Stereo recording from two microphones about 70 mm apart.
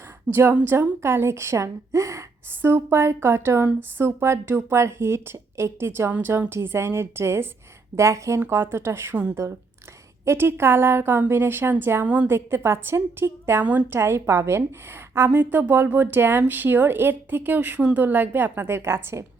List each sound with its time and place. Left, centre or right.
0.6 s speech: right
2.6 s speech: right
6.1 s a woman's voice: right
6.5 s speech: right
8.4 s speech: right
10.2 s speech: right
12.0 s a woman's voice: centre
12.3 s a woman's voice: right